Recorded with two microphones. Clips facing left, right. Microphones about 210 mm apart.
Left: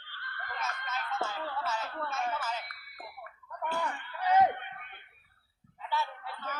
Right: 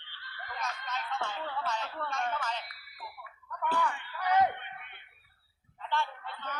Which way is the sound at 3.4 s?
25° left (ahead or behind).